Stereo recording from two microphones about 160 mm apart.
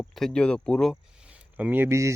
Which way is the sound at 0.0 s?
Centre (ahead or behind).